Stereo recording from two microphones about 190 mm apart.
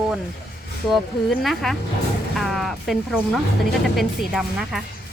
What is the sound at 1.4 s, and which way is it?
Speech, centre (ahead or behind).